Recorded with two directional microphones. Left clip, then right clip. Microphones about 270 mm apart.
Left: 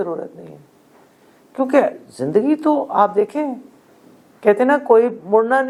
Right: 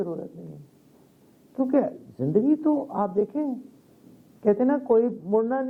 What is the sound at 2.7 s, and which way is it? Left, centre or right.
A man's voice, left.